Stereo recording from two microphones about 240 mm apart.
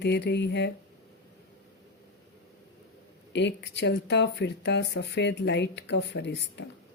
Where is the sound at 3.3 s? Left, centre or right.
Left.